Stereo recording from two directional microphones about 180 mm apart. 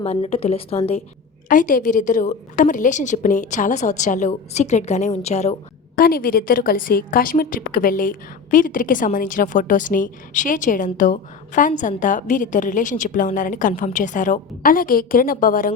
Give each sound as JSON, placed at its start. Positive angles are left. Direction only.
{"t": 0.0, "sound": "a woman's voice", "side_deg": 35}
{"t": 1.5, "sound": "a woman's voice", "side_deg": 45}
{"t": 6.0, "sound": "a woman's voice", "side_deg": 55}